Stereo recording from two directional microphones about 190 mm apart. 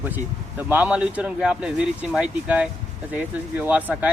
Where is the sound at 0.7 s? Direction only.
10° right (ahead or behind).